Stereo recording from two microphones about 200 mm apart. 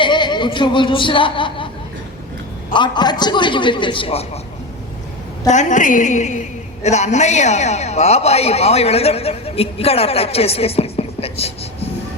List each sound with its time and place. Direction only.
0.0 s speech: 20° left (ahead or behind)
2.7 s a man's voice: 20° left (ahead or behind)
5.5 s a woman's voice: 40° left (ahead or behind)